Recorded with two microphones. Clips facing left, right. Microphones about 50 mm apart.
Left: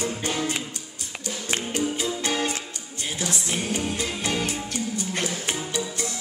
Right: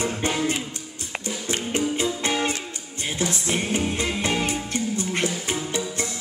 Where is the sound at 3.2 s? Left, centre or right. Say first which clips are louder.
Right 4 dB; right.